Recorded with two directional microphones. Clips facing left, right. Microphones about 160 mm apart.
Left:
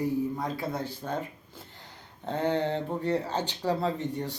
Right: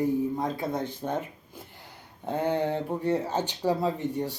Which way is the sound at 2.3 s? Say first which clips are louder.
Right 1 dB; 10° right (ahead or behind).